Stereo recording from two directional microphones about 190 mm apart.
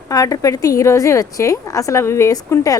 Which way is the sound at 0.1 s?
20° left (ahead or behind).